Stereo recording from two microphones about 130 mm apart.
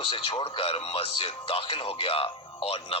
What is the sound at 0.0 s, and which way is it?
Speech, 40° left (ahead or behind).